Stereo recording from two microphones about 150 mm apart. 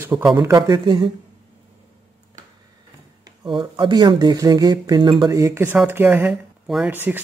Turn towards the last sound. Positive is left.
turn(degrees=-15)  # may be behind; listen again after turning